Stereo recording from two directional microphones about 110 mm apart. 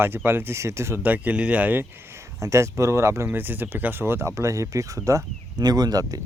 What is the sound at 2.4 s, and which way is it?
Speech, 25° right (ahead or behind).